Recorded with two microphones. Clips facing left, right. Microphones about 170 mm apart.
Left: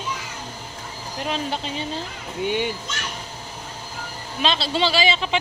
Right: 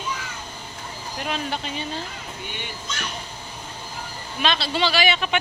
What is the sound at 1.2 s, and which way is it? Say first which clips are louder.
Speech: left 2 dB; 30° left (ahead or behind).